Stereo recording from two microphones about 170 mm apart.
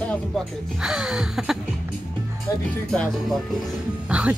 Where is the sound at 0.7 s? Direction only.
5° right (ahead or behind).